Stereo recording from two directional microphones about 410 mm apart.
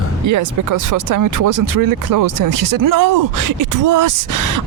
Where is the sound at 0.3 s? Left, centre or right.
Right.